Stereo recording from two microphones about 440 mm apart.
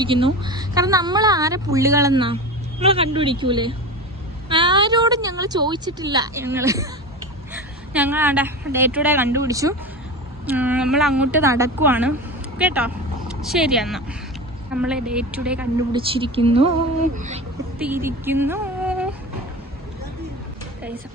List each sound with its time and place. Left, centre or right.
0.0 s a woman's voice: centre
17.7 s speech: centre